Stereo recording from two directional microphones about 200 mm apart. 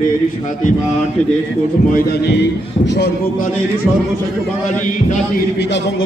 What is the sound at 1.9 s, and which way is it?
Music, 50° left (ahead or behind).